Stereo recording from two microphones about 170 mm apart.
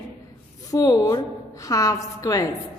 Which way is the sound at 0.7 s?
20° left (ahead or behind).